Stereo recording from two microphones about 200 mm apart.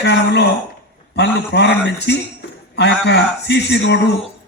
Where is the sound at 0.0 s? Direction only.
60° left (ahead or behind).